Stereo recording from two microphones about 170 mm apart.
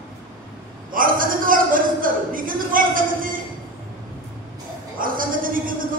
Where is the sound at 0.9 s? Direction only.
55° right (ahead or behind).